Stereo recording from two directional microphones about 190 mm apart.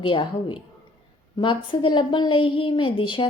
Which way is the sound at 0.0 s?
25° left (ahead or behind).